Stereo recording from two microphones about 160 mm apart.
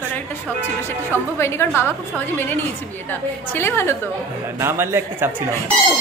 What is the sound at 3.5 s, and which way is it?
Speech, 15° left (ahead or behind).